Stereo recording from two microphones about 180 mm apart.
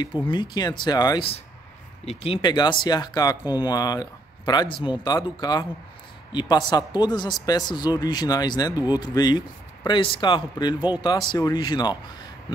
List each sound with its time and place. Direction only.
0.3 s speech: 25° left (ahead or behind)
8.7 s speech: 10° right (ahead or behind)
9.0 s speech: 20° left (ahead or behind)